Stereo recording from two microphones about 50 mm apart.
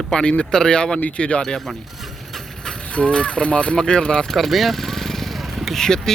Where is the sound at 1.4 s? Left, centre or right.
Centre.